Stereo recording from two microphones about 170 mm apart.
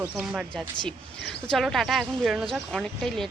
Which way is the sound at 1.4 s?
Centre (ahead or behind).